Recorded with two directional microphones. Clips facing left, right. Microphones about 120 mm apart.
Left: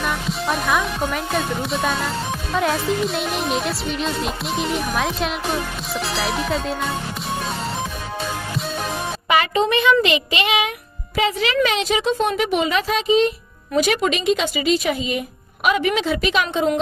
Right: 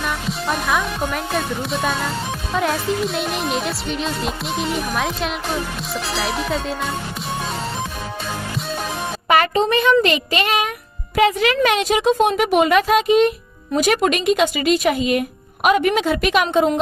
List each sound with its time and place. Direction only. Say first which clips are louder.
0.0 s speech: even; centre (ahead or behind)
9.3 s a woman's voice: right 2 dB; 40° right (ahead or behind); by 13.3 s 55° right (ahead or behind)
13.7 s a woman's voice: right 2 dB; 45° right (ahead or behind)